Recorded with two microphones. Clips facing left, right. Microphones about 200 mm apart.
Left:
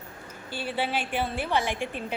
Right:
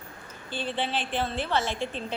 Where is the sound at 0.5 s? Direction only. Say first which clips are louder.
Left 1 dB; 10° left (ahead or behind).